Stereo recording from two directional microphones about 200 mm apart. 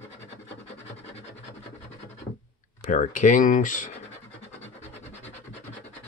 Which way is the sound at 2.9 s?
40° left (ahead or behind).